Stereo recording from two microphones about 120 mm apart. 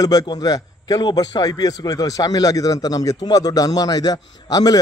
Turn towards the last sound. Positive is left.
turn(degrees=35)  # may be behind; listen again after turning